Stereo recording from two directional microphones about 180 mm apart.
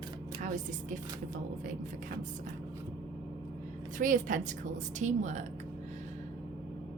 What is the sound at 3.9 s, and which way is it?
A woman's voice, 45° right (ahead or behind).